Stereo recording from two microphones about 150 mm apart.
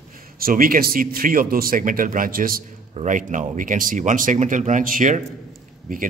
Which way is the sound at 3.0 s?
60° right (ahead or behind).